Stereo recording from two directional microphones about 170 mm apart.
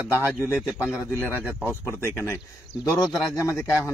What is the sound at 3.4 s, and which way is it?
Speech, 15° left (ahead or behind).